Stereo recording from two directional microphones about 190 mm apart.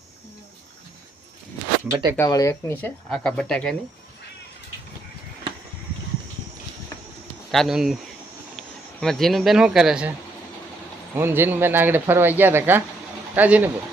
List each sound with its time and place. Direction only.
1.9 s speech: 20° right (ahead or behind)
2.1 s speech: 15° left (ahead or behind)
7.5 s speech: centre (ahead or behind)
11.1 s a man's voice: 10° right (ahead or behind)